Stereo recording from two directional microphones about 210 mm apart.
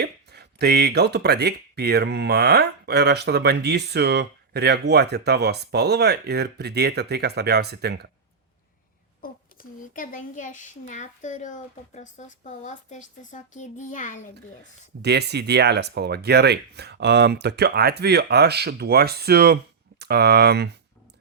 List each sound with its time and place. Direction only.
0.0 s speech: 50° right (ahead or behind)
9.2 s a child's voice: 40° left (ahead or behind)
15.0 s speech: 50° right (ahead or behind)